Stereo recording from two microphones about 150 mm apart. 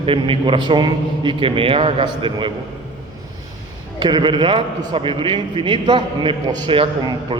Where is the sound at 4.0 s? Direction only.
30° right (ahead or behind).